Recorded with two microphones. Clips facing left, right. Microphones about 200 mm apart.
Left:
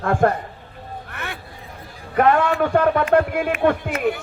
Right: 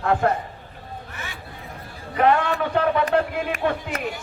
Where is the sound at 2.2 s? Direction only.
45° left (ahead or behind).